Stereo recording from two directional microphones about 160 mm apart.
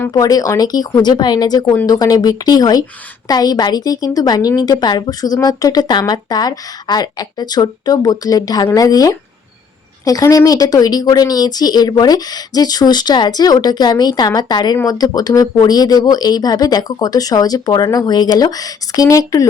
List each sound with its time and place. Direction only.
0.1 s a woman's voice: 25° left (ahead or behind)